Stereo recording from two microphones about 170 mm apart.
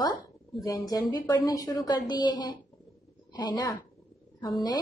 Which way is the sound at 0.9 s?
20° left (ahead or behind).